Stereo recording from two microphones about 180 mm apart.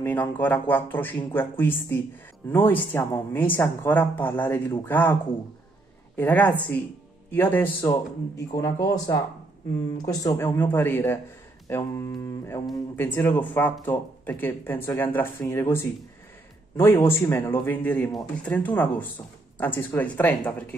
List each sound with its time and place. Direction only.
0.0 s speech: 10° left (ahead or behind)
6.1 s speech: 10° left (ahead or behind)